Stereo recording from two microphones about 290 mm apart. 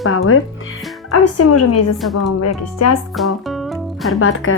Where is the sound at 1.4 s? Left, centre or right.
Left.